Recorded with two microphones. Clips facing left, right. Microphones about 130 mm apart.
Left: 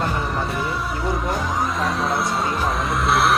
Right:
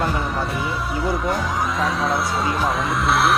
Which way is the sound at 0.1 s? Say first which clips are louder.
Even; centre (ahead or behind).